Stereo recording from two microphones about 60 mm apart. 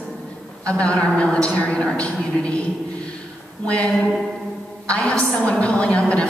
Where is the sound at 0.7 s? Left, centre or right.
Centre.